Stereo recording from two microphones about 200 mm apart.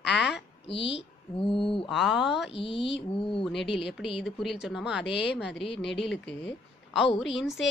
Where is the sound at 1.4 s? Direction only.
25° left (ahead or behind).